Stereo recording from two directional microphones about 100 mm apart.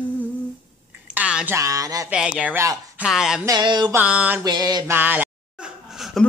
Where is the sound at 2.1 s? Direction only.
5° right (ahead or behind).